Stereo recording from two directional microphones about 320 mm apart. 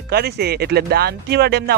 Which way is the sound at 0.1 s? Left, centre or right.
Right.